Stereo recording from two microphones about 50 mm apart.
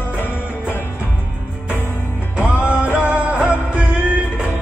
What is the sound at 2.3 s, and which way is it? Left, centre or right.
Music, right.